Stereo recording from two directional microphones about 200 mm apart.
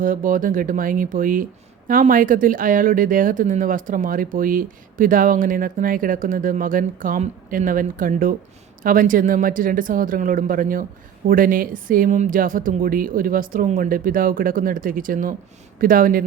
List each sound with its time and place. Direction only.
0.0 s speech: 40° right (ahead or behind)